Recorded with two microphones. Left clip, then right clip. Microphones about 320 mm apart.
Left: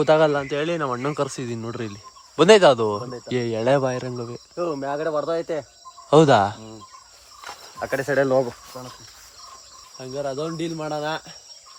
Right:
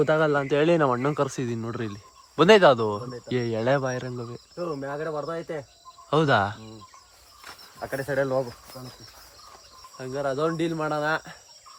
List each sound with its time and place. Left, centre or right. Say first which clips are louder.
0.0 s speech: left 4 dB; centre
4.5 s speech: left 6 dB; left
6.1 s speech: left 7 dB; centre
7.8 s speech: left 5 dB; left
10.0 s speech: right 1 dB; centre